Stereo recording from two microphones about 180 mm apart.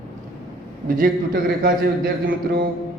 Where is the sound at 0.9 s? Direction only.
50° right (ahead or behind).